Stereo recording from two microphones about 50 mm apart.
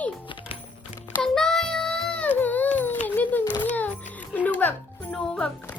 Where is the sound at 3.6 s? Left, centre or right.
Left.